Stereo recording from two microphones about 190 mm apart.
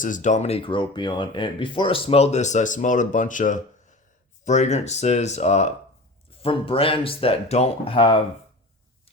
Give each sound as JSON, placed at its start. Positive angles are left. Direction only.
{"t": 0.0, "sound": "speech", "side_deg": 40}